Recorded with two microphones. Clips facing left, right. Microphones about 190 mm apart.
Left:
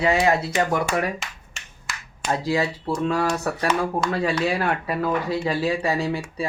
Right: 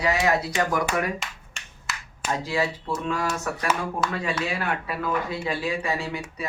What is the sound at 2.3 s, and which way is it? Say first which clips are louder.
Speech: left 3 dB; 35° left (ahead or behind).